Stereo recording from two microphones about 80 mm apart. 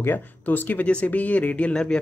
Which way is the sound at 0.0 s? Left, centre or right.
Left.